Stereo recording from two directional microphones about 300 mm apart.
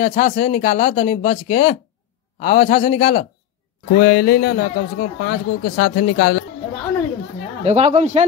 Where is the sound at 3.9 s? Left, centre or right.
Left.